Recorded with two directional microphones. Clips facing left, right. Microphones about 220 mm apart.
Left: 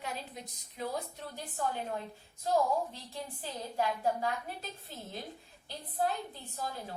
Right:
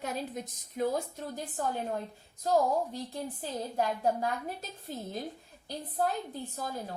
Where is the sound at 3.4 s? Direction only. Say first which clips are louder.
Right 2 dB; 45° right (ahead or behind).